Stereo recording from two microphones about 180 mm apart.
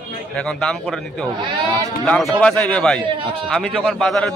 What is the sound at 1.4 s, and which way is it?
Speech, 25° right (ahead or behind).